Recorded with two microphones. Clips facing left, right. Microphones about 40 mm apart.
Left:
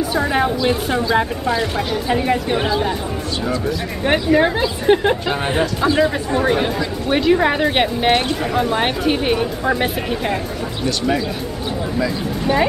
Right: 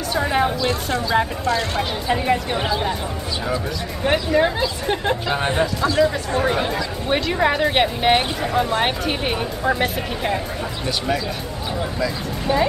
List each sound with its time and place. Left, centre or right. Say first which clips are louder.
0.1 s speech: right 2 dB; centre
2.0 s speech: left 2 dB; centre
4.0 s speech: left 3 dB; centre
6.3 s speech: left 3 dB; centre
12.0 s speech: left 3 dB; centre